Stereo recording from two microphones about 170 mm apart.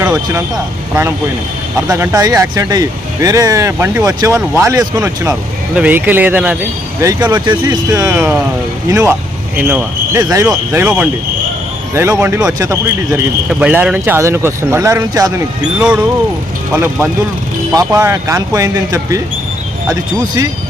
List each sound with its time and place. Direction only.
1.9 s speech: 20° right (ahead or behind)
7.3 s speech: 25° right (ahead or behind)
13.5 s speech: 5° right (ahead or behind)
15.6 s speech: 5° right (ahead or behind)
17.7 s speech: 20° right (ahead or behind)